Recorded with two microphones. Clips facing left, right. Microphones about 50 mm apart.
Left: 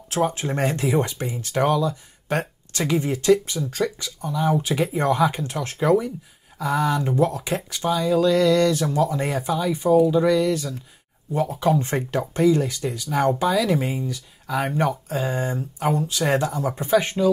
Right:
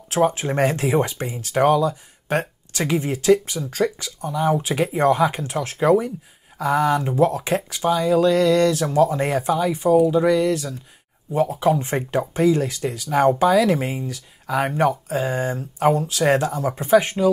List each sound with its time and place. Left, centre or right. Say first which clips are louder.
0.1 s speech: right 3 dB; right
1.7 s speech: right 4 dB; right
2.7 s speech: even; right